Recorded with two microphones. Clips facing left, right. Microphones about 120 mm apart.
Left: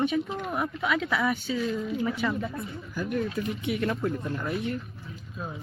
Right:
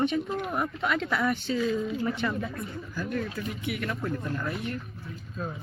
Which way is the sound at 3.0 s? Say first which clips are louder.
Left 3 dB; 15° left (ahead or behind).